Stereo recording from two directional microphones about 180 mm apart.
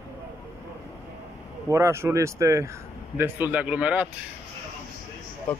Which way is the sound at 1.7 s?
15° right (ahead or behind).